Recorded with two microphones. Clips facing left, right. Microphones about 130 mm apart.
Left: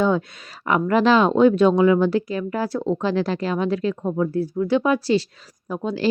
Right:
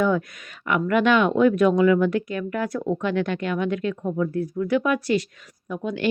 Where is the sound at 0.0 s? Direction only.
25° left (ahead or behind).